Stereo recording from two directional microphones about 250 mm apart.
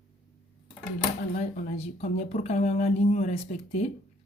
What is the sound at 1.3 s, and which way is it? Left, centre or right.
Speech, left.